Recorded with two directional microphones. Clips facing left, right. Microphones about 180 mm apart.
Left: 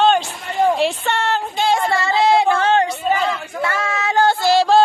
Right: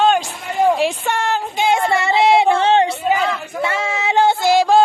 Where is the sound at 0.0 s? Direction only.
10° right (ahead or behind); by 3.0 s 30° right (ahead or behind).